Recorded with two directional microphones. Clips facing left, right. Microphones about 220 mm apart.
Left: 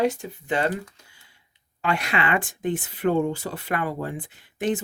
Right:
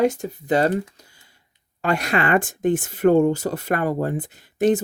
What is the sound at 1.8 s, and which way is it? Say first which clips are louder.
Speech: right 4 dB; 40° right (ahead or behind).